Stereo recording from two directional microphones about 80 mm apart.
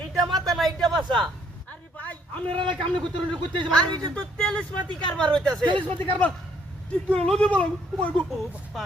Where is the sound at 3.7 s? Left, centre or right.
Centre.